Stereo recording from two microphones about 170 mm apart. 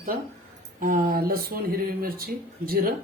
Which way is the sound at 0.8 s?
55° right (ahead or behind).